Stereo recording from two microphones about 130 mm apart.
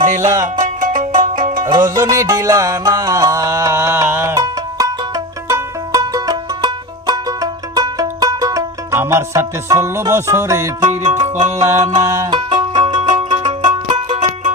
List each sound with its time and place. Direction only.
0.0 s music: 70° right (ahead or behind)
1.4 s music: 85° right
1.6 s music: 30° right (ahead or behind)
11.0 s music: 65° right (ahead or behind)
12.0 s music: 30° right (ahead or behind)